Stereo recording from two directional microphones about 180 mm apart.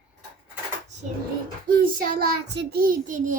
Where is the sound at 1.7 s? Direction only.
55° right (ahead or behind).